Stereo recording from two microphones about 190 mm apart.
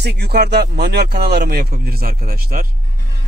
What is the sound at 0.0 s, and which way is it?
Speech, 60° right (ahead or behind).